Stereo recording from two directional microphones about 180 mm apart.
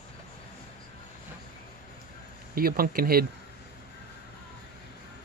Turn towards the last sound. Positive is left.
turn(degrees=-55)  # may be behind; listen again after turning